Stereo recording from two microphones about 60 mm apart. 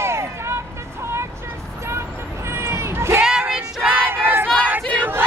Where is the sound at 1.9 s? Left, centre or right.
Right.